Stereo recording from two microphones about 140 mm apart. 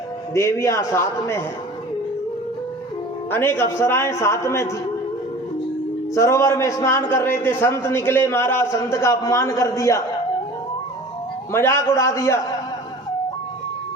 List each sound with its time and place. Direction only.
0.3 s a man's voice: 20° left (ahead or behind)
3.3 s a man's voice: 15° left (ahead or behind)
6.1 s a man's voice: 20° left (ahead or behind)
11.5 s a man's voice: 20° left (ahead or behind)